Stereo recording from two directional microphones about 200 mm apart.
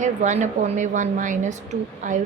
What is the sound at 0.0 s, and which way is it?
A woman's voice, 35° right (ahead or behind).